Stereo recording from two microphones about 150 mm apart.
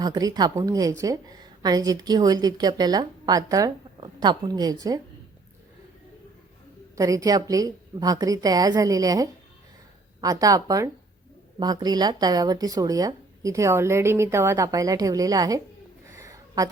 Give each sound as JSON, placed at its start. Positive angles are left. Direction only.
{"t": 0.0, "sound": "a woman's voice", "side_deg": -25}
{"t": 6.9, "sound": "a woman's voice", "side_deg": -20}
{"t": 16.0, "sound": "a sound", "side_deg": -20}